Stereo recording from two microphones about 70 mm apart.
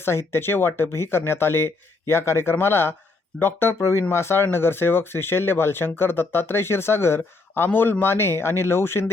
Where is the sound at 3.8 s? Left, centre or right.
Left.